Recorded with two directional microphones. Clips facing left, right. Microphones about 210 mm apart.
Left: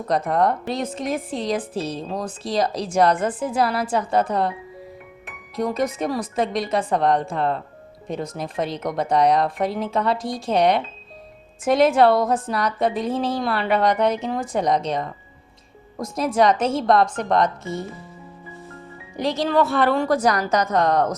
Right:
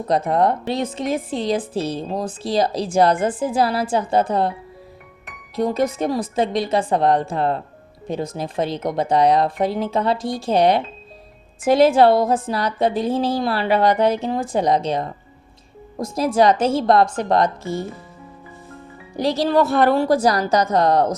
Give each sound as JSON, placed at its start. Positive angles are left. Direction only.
{"t": 0.3, "sound": "a woman's voice", "side_deg": -25}
{"t": 5.5, "sound": "a woman's voice", "side_deg": -30}
{"t": 19.1, "sound": "a woman's voice", "side_deg": -35}